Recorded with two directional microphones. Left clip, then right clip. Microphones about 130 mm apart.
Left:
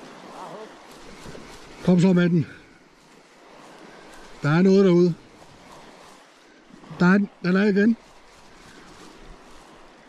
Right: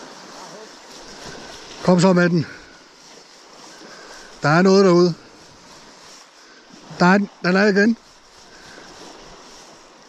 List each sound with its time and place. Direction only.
0.4 s waves: 5° left (ahead or behind)
1.8 s a man's voice: 20° left (ahead or behind)
4.4 s a man's voice: 20° left (ahead or behind)
7.2 s speech: 15° left (ahead or behind)